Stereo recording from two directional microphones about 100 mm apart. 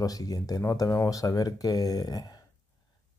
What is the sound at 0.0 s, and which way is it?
Speech, 40° left (ahead or behind).